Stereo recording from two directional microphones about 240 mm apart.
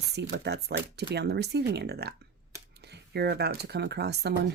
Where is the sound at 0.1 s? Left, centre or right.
Right.